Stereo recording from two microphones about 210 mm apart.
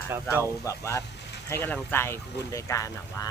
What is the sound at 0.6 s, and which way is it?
Speech, 15° left (ahead or behind).